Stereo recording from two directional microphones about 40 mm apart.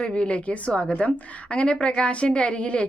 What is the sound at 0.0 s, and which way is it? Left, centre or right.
Speech, left.